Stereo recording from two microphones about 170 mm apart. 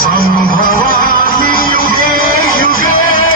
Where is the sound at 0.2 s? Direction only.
55° left (ahead or behind).